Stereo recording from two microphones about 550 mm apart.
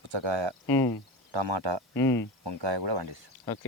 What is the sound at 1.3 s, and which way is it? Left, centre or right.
Speech, right.